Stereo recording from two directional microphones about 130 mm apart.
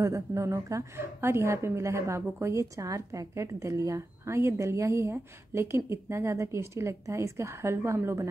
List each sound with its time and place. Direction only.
0.0 s a woman's voice: 25° right (ahead or behind)